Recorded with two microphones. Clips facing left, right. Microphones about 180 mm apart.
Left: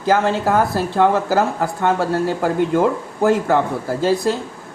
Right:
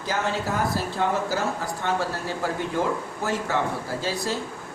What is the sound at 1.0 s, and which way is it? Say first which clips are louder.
Speech: left 10 dB; 90° left.